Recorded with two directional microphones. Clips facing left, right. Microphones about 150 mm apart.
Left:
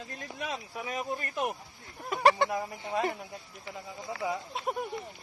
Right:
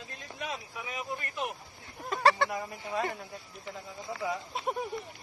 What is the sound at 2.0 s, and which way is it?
Speech, 15° left (ahead or behind).